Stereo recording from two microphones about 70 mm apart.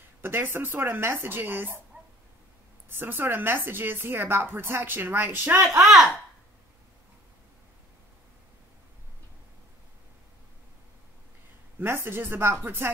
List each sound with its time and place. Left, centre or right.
0.2 s speech: right
2.9 s speech: right
5.8 s speech: centre
11.8 s speech: right